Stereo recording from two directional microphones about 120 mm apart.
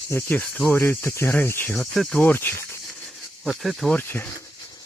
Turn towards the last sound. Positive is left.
turn(degrees=15)  # may be behind; listen again after turning